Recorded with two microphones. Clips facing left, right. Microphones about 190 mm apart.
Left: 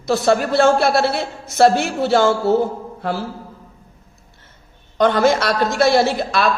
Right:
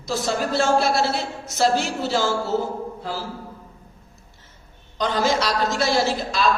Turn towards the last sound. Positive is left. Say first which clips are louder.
# left 5 dB
turn(degrees=60)  # may be behind; listen again after turning